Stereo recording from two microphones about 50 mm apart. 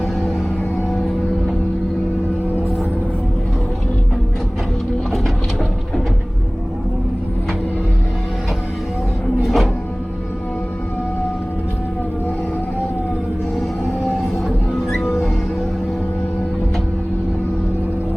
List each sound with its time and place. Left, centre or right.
9.4 s music: centre
14.1 s music: centre
15.0 s music: left